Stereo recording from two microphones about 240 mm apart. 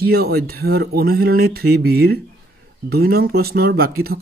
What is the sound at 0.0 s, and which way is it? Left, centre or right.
Speech, right.